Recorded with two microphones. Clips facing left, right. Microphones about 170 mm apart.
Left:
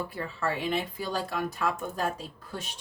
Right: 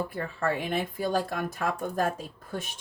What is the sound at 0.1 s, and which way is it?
Speech, 50° right (ahead or behind).